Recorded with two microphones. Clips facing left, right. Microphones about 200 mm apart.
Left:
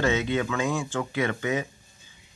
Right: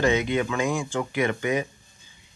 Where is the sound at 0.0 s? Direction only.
15° right (ahead or behind).